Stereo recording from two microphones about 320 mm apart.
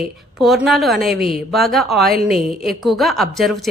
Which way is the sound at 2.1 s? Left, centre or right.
Right.